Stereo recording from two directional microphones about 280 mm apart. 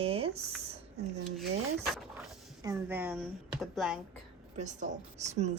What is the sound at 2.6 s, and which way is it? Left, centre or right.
Speech, centre.